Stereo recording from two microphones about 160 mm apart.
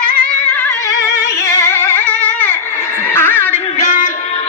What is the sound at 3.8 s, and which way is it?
Music, 55° left (ahead or behind).